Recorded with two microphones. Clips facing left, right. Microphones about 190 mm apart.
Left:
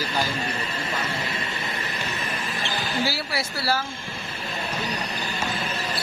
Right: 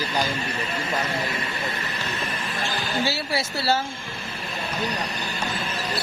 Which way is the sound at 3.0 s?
25° right (ahead or behind).